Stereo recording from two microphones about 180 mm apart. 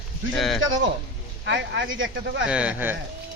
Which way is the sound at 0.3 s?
Centre (ahead or behind).